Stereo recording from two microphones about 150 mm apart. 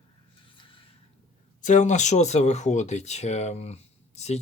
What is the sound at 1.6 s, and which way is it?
Speech, 55° left (ahead or behind).